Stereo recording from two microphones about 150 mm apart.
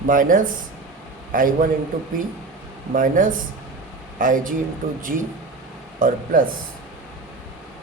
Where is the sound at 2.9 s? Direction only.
60° right (ahead or behind).